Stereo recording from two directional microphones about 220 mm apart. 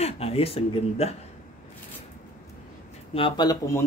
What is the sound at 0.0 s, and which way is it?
Speech, 25° left (ahead or behind).